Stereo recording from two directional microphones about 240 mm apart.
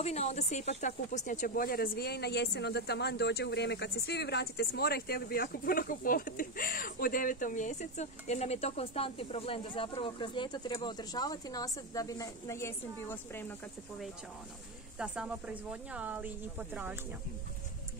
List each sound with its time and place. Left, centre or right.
0.0 s speech: left; by 14.0 s centre
15.0 s speech: centre